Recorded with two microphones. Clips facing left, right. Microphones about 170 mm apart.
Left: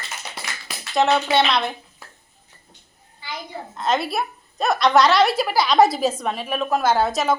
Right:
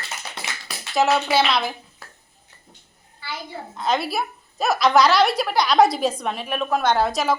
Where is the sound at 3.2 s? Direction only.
15° left (ahead or behind).